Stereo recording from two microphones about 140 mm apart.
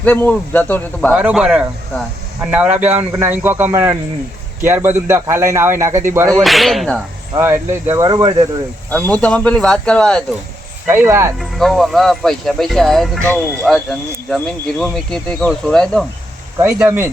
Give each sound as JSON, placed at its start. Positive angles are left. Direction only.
{"t": 0.0, "sound": "speech", "side_deg": 10}
{"t": 1.1, "sound": "speech", "side_deg": -5}
{"t": 6.4, "sound": "speech", "side_deg": 0}
{"t": 7.3, "sound": "speech", "side_deg": -20}
{"t": 8.0, "sound": "speech", "side_deg": -30}
{"t": 8.9, "sound": "speech", "side_deg": 10}
{"t": 10.8, "sound": "speech", "side_deg": -15}
{"t": 11.3, "sound": "speech", "side_deg": 0}
{"t": 16.6, "sound": "speech", "side_deg": -20}